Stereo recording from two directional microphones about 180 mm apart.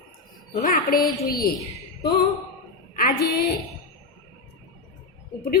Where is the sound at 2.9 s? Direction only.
55° left (ahead or behind).